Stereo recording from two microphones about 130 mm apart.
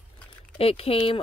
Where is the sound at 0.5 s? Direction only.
50° left (ahead or behind).